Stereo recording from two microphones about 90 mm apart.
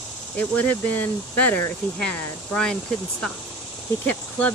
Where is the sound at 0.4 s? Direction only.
20° left (ahead or behind).